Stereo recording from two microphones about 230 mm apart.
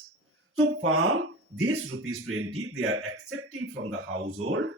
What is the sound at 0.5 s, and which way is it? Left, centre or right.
Speech, right.